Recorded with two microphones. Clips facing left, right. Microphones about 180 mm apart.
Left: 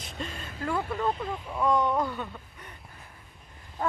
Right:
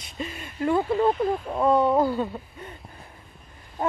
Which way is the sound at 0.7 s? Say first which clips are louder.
Right 7 dB; 25° right (ahead or behind).